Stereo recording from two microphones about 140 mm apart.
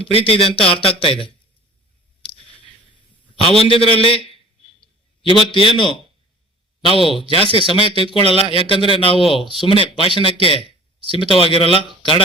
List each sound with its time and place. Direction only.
0.0 s a man's voice: 40° left (ahead or behind)
3.5 s a man's voice: 45° left (ahead or behind)
5.2 s a man's voice: 40° left (ahead or behind)